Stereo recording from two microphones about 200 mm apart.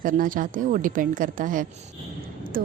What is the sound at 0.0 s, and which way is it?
A woman's voice, 45° right (ahead or behind).